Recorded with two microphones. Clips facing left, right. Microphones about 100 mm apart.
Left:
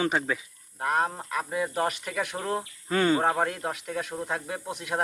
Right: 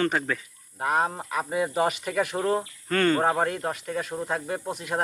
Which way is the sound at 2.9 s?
10° left (ahead or behind).